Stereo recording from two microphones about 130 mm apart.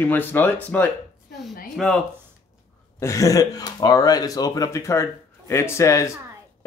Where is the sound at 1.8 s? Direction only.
Centre (ahead or behind).